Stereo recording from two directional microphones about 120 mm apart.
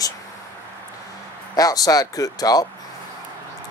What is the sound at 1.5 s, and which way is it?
Speech, 30° left (ahead or behind).